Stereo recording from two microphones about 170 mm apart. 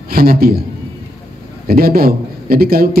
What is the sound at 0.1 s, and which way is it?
Speech, 60° right (ahead or behind).